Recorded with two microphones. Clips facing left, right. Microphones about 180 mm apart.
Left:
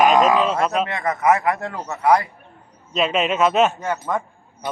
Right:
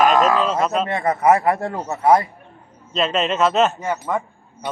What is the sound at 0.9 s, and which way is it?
A man's voice, 30° right (ahead or behind).